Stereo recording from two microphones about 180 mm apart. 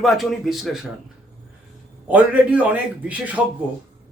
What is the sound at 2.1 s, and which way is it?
A man's voice, 5° right (ahead or behind).